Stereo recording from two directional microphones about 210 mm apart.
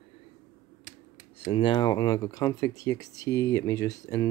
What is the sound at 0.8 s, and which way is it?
Speech, 30° left (ahead or behind).